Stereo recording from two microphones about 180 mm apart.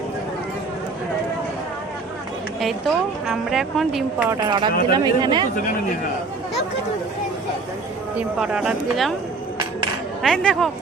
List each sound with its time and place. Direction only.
2.6 s a woman's voice: centre (ahead or behind)
4.3 s speech: 25° right (ahead or behind)
8.4 s a woman's voice: 5° right (ahead or behind)
10.2 s a woman's voice: 5° left (ahead or behind)